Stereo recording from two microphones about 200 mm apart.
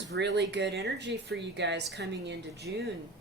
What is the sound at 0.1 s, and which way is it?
Speech, 60° right (ahead or behind).